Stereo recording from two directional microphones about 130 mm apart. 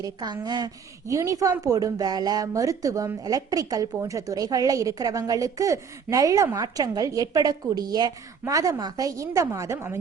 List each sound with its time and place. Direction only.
0.0 s a woman's voice: 30° right (ahead or behind)